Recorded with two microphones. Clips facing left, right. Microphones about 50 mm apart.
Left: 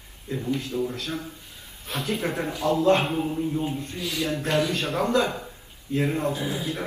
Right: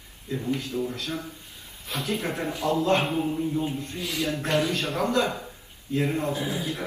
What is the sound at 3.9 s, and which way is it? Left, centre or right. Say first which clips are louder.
Speech: left 1 dB; right.